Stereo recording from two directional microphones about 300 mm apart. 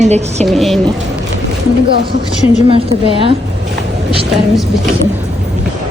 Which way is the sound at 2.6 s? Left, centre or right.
Centre.